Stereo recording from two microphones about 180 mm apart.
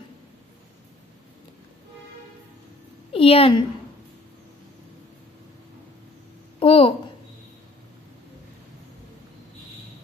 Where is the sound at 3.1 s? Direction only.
30° left (ahead or behind).